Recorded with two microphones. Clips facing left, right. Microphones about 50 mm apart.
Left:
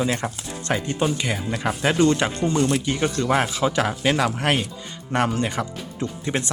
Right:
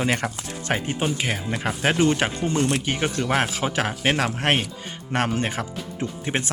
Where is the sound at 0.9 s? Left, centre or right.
Centre.